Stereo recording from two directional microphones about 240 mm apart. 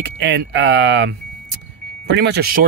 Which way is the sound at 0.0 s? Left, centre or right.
Right.